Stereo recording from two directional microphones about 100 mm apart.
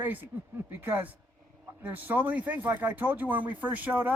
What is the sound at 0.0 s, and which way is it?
Speech, 20° right (ahead or behind).